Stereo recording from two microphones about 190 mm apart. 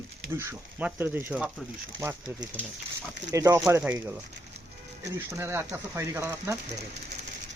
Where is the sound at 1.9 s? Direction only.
20° right (ahead or behind).